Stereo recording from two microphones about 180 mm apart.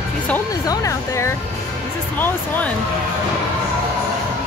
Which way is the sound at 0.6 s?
15° left (ahead or behind).